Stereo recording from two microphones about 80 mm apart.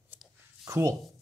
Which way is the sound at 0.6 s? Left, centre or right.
Right.